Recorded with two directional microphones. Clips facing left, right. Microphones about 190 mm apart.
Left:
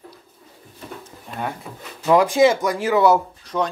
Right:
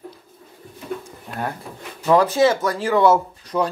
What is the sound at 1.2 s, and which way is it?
Speech, centre (ahead or behind).